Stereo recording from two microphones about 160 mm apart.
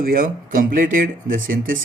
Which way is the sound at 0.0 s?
60° right (ahead or behind).